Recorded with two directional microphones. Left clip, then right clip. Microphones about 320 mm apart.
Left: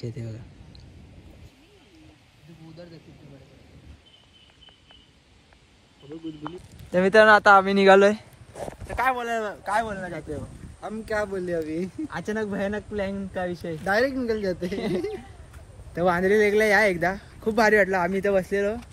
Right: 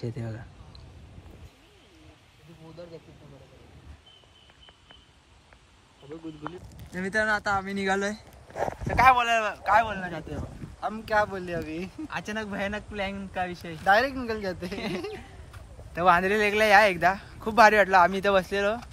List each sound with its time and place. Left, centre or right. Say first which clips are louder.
0.0 s speech: right 1 dB; centre
6.4 s speech: left 2 dB; centre
8.8 s speech: right 5 dB; right
9.2 s speech: right 3 dB; centre